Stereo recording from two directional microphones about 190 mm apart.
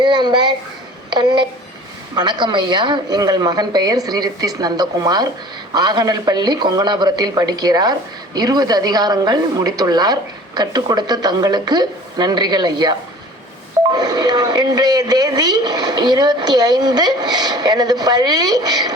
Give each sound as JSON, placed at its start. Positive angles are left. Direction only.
{"t": 0.0, "sound": "speech", "side_deg": -25}